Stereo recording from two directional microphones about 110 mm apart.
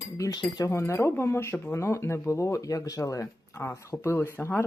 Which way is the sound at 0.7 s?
25° left (ahead or behind).